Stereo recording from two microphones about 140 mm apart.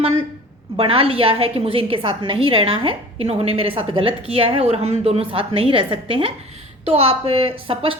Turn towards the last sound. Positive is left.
turn(degrees=-40)  # may be behind; listen again after turning